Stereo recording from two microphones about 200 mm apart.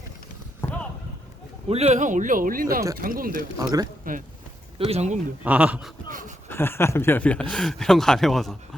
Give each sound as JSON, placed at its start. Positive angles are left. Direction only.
{"t": 1.6, "sound": "a man's voice", "side_deg": -30}
{"t": 3.6, "sound": "speech", "side_deg": -20}
{"t": 4.1, "sound": "speech", "side_deg": -45}
{"t": 4.8, "sound": "a man's voice", "side_deg": -30}
{"t": 5.4, "sound": "speech", "side_deg": -5}
{"t": 6.1, "sound": "speech", "side_deg": -40}
{"t": 6.5, "sound": "speech", "side_deg": 10}